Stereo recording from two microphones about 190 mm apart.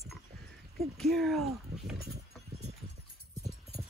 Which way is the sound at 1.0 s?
Centre (ahead or behind).